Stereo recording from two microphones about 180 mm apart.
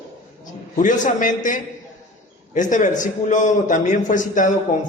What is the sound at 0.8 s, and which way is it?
A man's voice, 45° left (ahead or behind).